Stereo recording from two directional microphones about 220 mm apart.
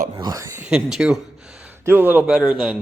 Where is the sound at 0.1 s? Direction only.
15° right (ahead or behind).